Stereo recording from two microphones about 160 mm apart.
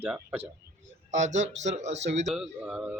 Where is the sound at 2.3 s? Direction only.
5° right (ahead or behind).